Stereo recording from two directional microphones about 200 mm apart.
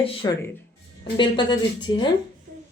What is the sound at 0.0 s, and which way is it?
Speech, 25° left (ahead or behind).